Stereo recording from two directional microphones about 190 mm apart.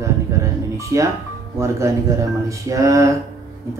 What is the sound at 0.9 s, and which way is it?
Speech, 15° right (ahead or behind).